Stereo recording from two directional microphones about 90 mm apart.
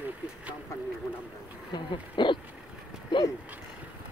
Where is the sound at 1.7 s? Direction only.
60° left (ahead or behind).